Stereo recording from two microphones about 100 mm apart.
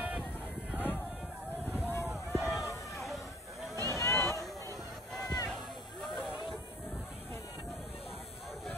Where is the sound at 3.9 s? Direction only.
30° left (ahead or behind).